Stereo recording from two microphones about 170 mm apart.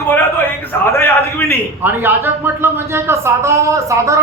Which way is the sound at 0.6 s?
15° left (ahead or behind).